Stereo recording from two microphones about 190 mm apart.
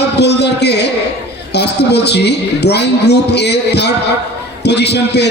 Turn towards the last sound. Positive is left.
turn(degrees=60)  # may be behind; listen again after turning